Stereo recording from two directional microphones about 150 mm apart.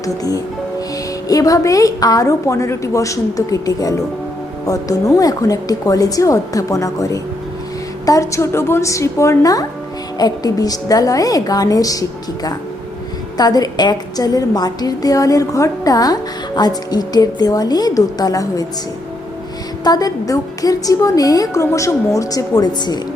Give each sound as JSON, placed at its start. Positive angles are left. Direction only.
{"t": 0.0, "sound": "a woman's voice", "side_deg": 20}
{"t": 19.8, "sound": "a woman's voice", "side_deg": 25}